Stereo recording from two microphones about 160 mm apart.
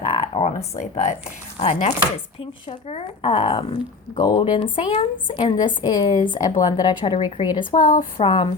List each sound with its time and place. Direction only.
0.0 s a sound: 40° left (ahead or behind)
1.5 s chopping: 50° left (ahead or behind)
2.4 s a woman's voice: 35° left (ahead or behind)
7.6 s a woman's voice: 55° left (ahead or behind)
8.2 s a woman's voice: 30° left (ahead or behind)